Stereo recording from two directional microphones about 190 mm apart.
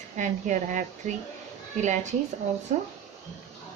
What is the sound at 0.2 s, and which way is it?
Speech, 40° right (ahead or behind).